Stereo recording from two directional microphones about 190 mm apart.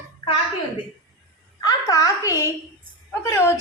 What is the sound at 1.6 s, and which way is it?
A woman's voice, 20° left (ahead or behind).